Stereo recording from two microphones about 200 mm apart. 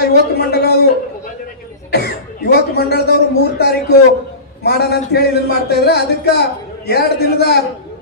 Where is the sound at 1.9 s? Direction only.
50° left (ahead or behind).